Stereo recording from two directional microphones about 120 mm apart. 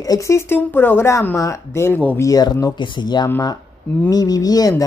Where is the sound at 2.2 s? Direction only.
30° left (ahead or behind).